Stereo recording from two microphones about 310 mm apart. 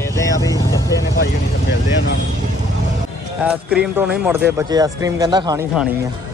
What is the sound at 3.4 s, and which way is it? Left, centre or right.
Speech, centre.